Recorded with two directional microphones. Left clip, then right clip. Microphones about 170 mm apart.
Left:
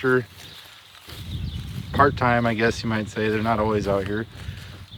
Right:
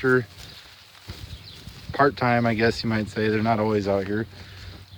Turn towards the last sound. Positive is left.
turn(degrees=-15)  # may be behind; listen again after turning